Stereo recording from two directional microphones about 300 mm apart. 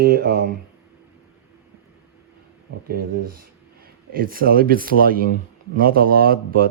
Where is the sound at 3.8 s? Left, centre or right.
Right.